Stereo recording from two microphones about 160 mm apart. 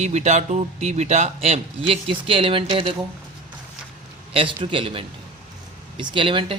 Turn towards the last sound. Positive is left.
turn(degrees=-30)  # may be behind; listen again after turning